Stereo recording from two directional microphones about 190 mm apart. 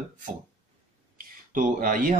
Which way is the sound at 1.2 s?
45° right (ahead or behind).